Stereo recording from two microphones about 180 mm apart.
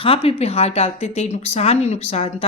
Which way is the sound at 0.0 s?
30° left (ahead or behind).